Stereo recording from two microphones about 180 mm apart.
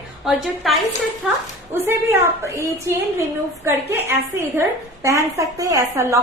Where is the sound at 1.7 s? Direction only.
15° right (ahead or behind).